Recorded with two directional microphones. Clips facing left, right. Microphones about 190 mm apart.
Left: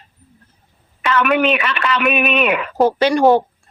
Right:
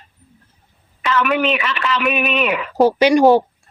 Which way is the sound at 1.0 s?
60° left (ahead or behind).